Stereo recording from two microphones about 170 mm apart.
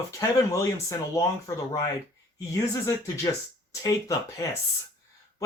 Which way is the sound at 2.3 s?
20° left (ahead or behind).